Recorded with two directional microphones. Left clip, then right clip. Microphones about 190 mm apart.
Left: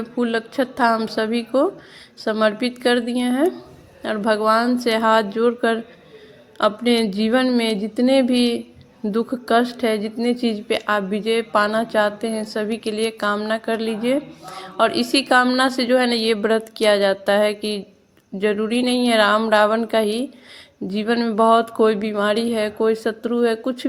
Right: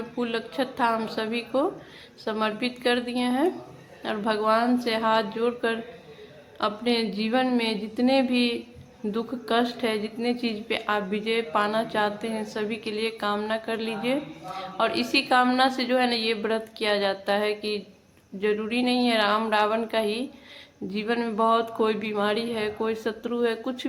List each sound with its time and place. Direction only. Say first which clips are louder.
0.2 s a woman's voice: left 7 dB; 30° left (ahead or behind)